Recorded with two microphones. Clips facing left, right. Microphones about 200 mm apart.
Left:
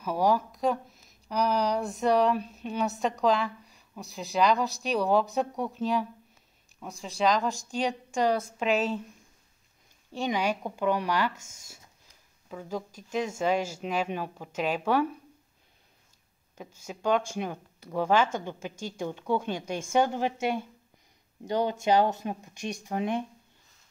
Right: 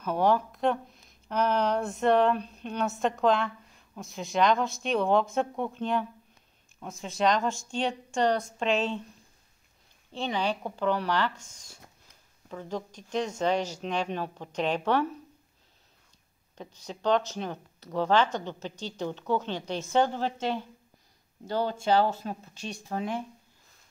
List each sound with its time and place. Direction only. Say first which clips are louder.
0.0 s speech: right 1 dB; 5° left (ahead or behind)
10.1 s speech: left 1 dB; 10° left (ahead or behind)
16.5 s speech: even; 10° left (ahead or behind)